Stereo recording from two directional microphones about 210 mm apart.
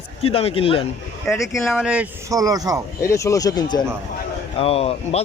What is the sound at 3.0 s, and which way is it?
A man's voice, 15° left (ahead or behind).